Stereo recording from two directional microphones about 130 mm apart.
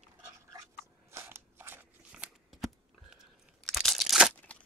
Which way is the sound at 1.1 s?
20° right (ahead or behind).